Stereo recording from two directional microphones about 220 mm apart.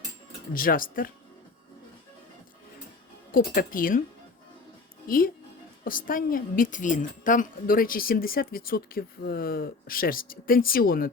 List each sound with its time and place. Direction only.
0.5 s a woman's voice: 40° left (ahead or behind)
3.3 s a woman's voice: 40° left (ahead or behind)
5.0 s a woman's voice: 40° left (ahead or behind)